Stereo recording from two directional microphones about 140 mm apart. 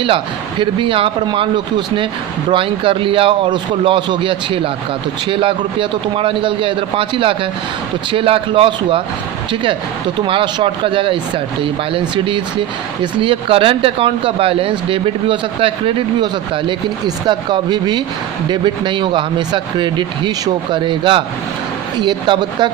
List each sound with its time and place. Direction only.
0.6 s speech: 35° right (ahead or behind)
10.2 s speech: 35° right (ahead or behind)